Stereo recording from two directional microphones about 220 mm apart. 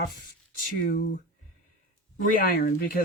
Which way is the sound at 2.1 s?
40° left (ahead or behind).